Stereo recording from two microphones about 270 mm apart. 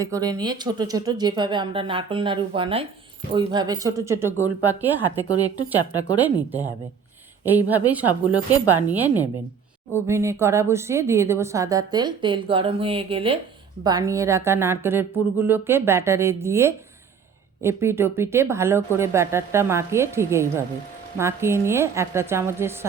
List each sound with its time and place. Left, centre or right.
0.0 s speech: centre
5.9 s speech: centre
6.1 s speech: centre